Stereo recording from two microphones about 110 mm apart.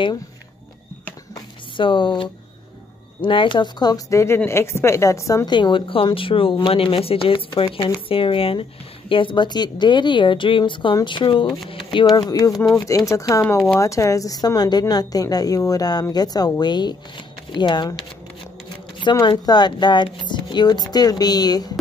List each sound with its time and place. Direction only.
1.8 s a woman's voice: 50° left (ahead or behind)
12.3 s a woman's voice: 35° left (ahead or behind)
12.5 s speech: centre (ahead or behind)
12.8 s a woman's voice: 30° left (ahead or behind)
19.2 s a woman's voice: 40° left (ahead or behind)